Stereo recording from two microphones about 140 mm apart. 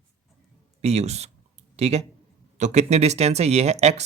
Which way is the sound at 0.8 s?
50° right (ahead or behind).